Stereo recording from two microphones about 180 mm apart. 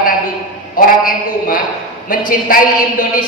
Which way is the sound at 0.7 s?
50° left (ahead or behind).